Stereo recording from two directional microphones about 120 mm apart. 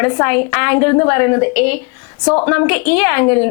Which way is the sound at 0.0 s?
20° left (ahead or behind).